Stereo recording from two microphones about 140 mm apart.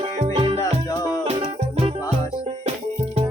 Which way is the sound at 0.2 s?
45° right (ahead or behind).